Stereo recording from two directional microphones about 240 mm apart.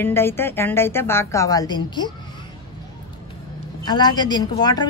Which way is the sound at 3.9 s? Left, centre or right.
Centre.